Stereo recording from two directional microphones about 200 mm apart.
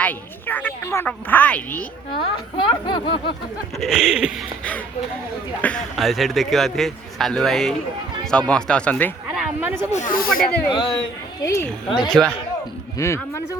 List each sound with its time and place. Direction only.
0.0 s a woman's voice: 10° left (ahead or behind)
2.1 s speech: 25° left (ahead or behind)
3.8 s a man's voice: 5° right (ahead or behind)
9.3 s speech: 5° right (ahead or behind)
9.9 s speech: 40° left (ahead or behind)
11.4 s speech: 15° left (ahead or behind)